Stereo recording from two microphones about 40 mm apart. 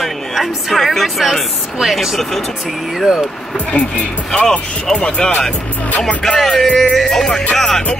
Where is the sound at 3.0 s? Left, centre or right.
Centre.